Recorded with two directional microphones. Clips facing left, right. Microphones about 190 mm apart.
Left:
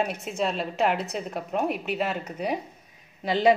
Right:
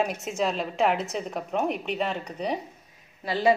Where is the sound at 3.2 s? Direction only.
20° left (ahead or behind).